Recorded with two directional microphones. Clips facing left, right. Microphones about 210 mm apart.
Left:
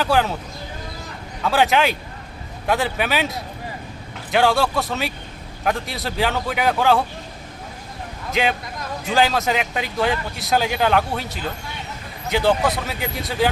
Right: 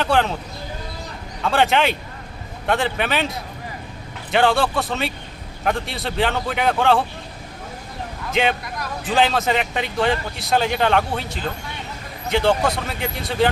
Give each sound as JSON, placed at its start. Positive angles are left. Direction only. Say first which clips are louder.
{"t": 0.0, "sound": "speech", "louder": "even", "side_deg": 0}
{"t": 1.4, "sound": "speech", "louder": "even", "side_deg": 0}
{"t": 8.3, "sound": "speech", "louder": "right 1 dB", "side_deg": 0}